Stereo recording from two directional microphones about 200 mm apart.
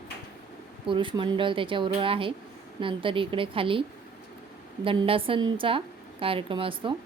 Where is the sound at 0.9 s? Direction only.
25° right (ahead or behind).